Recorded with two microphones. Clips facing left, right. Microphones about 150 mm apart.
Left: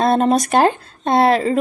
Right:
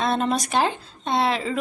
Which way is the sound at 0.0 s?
45° left (ahead or behind).